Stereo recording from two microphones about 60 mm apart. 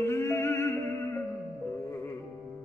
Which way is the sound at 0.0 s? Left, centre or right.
Left.